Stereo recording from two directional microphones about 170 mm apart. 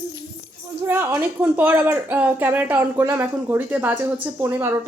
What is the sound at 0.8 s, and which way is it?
Speech, 10° right (ahead or behind).